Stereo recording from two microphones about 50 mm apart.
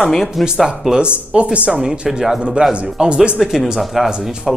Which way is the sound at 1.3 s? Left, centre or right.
Right.